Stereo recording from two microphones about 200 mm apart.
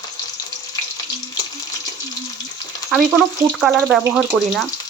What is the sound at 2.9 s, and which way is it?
Speech, centre (ahead or behind).